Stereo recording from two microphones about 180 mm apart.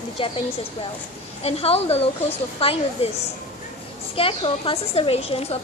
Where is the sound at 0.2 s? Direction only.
30° left (ahead or behind).